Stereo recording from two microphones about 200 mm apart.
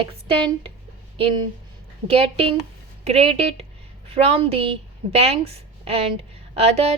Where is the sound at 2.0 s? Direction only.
30° right (ahead or behind).